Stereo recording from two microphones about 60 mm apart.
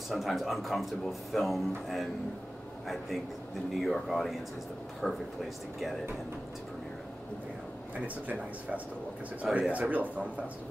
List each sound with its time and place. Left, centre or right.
0.1 s speech: centre
3.8 s speech: centre
8.3 s speech: right